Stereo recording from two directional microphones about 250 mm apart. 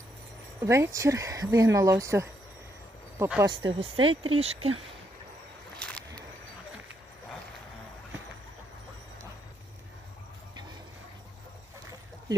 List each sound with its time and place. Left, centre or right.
0.6 s speech: centre
3.5 s speech: centre
5.8 s a sound: centre